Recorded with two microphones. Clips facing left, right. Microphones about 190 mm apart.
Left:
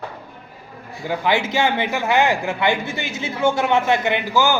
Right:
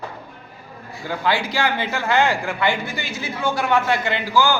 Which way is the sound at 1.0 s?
15° left (ahead or behind).